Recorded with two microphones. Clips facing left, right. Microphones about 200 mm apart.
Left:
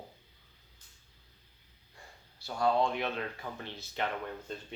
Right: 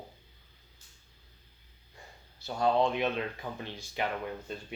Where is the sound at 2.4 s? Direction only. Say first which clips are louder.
Right 2 dB; 20° right (ahead or behind).